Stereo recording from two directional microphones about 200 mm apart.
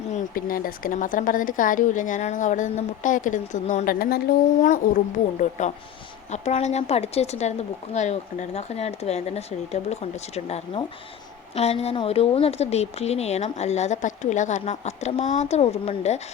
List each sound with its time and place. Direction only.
0.1 s speech: 45° left (ahead or behind)